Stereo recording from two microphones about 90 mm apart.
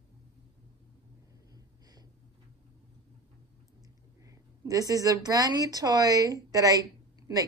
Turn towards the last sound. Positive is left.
turn(degrees=-40)  # may be behind; listen again after turning